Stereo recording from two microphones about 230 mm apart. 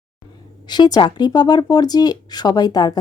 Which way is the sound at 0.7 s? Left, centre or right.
Centre.